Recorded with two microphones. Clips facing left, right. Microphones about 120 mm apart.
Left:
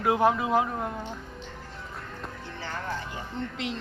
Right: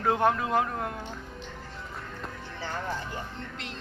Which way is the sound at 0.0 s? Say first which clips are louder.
Left 2 dB; 5° left (ahead or behind).